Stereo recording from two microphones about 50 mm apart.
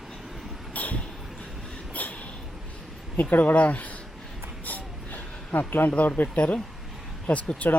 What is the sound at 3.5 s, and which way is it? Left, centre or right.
Speech, left.